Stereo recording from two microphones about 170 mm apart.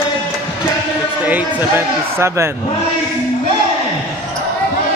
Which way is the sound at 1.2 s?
10° right (ahead or behind).